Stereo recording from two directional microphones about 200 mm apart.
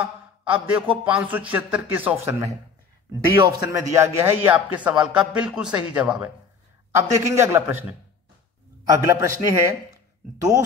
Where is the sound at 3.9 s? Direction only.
10° right (ahead or behind).